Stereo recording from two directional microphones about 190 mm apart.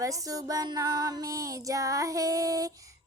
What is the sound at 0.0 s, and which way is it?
Female singing, 20° right (ahead or behind).